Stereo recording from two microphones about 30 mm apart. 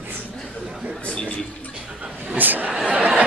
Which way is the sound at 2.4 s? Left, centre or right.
Right.